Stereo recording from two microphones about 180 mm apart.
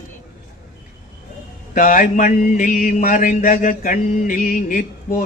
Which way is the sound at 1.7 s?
45° left (ahead or behind).